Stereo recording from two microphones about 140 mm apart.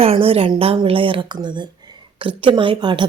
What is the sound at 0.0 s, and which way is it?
A woman's voice, 45° right (ahead or behind).